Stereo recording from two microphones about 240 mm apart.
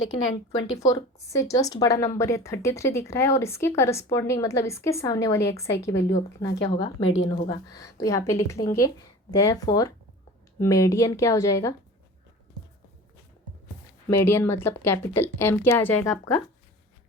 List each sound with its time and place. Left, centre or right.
0.8 s a woman's voice: centre
7.0 s speech: left
7.3 s a woman's voice: centre
14.1 s a woman's voice: centre